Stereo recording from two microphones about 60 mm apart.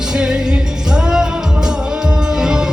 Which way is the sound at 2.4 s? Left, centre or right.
Centre.